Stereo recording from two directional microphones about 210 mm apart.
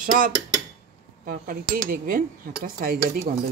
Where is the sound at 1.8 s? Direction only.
45° right (ahead or behind).